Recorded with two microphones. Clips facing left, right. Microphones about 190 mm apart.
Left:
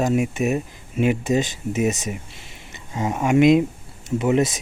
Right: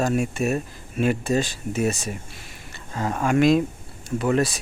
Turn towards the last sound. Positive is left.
turn(degrees=20)  # may be behind; listen again after turning